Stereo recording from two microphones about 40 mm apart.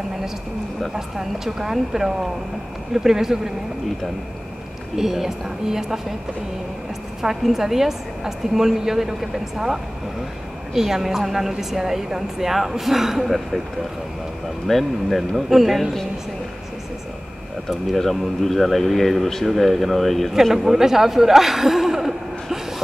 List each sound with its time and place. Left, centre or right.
0.9 s a woman's voice: centre
4.9 s a woman's voice: centre
7.2 s a woman's voice: centre
14.7 s speech: centre
17.6 s speech: centre